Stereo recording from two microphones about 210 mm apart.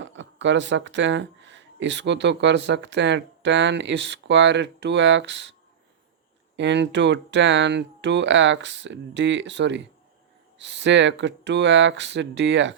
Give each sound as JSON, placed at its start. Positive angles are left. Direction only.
{"t": 0.0, "sound": "speech", "side_deg": -60}
{"t": 6.6, "sound": "speech", "side_deg": -55}